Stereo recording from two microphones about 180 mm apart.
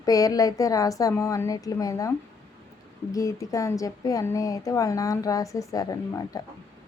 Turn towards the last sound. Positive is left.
turn(degrees=20)  # may be behind; listen again after turning